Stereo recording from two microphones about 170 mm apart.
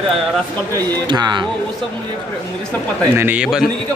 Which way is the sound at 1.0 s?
25° right (ahead or behind).